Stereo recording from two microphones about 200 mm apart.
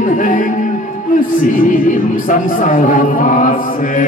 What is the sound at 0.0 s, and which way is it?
Speech, 40° left (ahead or behind).